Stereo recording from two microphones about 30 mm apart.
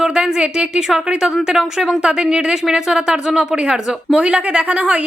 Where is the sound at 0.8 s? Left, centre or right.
Right.